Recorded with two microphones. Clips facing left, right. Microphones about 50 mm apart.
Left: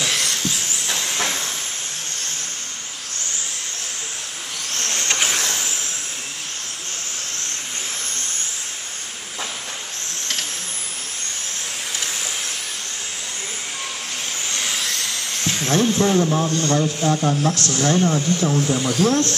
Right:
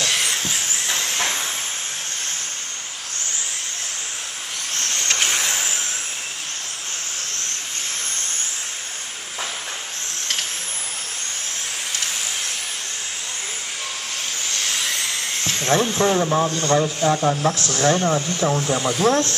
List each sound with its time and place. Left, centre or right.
1.1 s vehicle: centre
4.8 s vehicle: centre
5.4 s vehicle: centre
15.4 s a sound: centre
15.7 s speech: centre
16.7 s speech: centre